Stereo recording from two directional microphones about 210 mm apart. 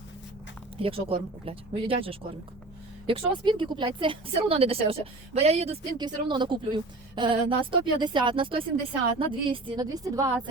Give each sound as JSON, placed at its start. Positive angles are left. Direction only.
{"t": 0.8, "sound": "a woman's voice", "side_deg": -25}